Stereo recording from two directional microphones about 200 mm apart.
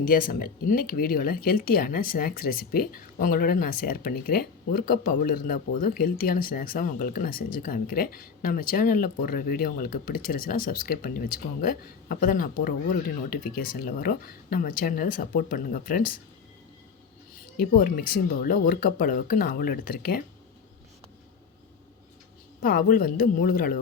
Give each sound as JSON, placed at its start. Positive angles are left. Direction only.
{"t": 0.0, "sound": "speech", "side_deg": 45}
{"t": 17.6, "sound": "speech", "side_deg": 45}
{"t": 22.6, "sound": "speech", "side_deg": 45}